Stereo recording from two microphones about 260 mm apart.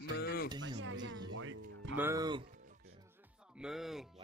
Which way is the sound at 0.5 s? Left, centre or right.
Right.